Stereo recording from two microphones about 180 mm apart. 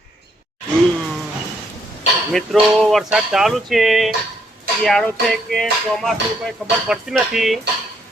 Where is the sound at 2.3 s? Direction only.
Centre (ahead or behind).